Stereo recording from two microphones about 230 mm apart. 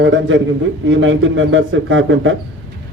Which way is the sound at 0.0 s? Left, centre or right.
Right.